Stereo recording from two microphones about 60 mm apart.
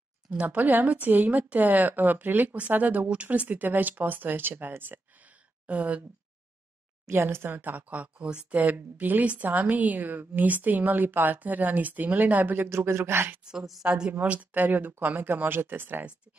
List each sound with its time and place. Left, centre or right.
0.3 s speech: right
7.1 s speech: right
12.6 s speech: right
13.4 s a woman's voice: centre; by 16.1 s right